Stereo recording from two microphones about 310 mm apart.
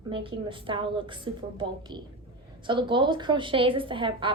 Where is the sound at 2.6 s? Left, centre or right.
Centre.